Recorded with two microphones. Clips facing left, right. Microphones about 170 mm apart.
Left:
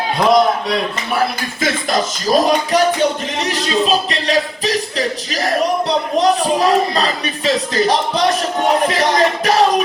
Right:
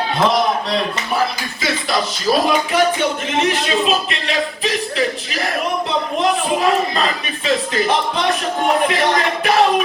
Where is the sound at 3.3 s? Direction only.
40° left (ahead or behind).